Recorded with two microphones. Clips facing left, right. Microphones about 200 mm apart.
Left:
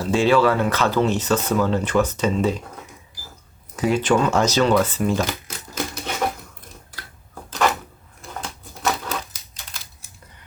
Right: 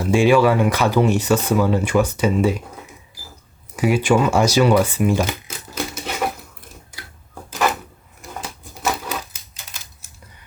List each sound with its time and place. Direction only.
0.0 s speech: 10° right (ahead or behind)
3.8 s speech: 10° right (ahead or behind)
7.5 s drawer open or close: 5° right (ahead or behind)
8.3 s a sound: 10° right (ahead or behind)